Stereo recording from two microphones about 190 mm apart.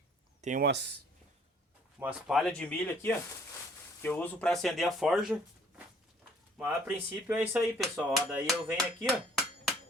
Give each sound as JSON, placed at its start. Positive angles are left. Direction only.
{"t": 0.6, "sound": "speech", "side_deg": -60}
{"t": 2.0, "sound": "speech", "side_deg": -5}